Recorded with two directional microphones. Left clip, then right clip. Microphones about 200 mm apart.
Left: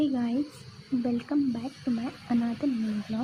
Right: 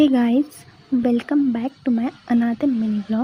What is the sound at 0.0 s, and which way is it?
Speech, 35° right (ahead or behind).